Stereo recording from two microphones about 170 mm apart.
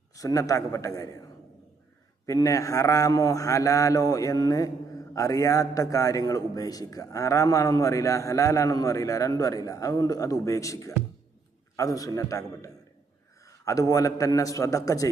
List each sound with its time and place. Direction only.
0.2 s a man's voice: 20° left (ahead or behind)
2.2 s a man's voice: 20° left (ahead or behind)